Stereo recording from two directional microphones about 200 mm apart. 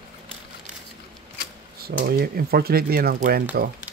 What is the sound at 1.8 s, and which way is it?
Speech, 50° right (ahead or behind).